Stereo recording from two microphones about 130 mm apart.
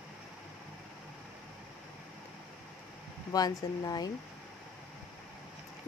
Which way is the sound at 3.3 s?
30° left (ahead or behind).